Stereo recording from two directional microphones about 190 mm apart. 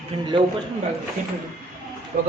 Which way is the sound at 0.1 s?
30° right (ahead or behind).